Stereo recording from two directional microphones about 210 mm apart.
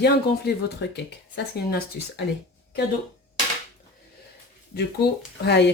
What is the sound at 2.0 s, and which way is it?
Speech, 45° left (ahead or behind).